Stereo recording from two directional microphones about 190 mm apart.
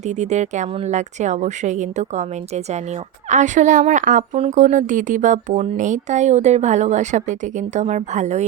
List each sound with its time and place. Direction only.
0.0 s a woman's voice: 35° right (ahead or behind)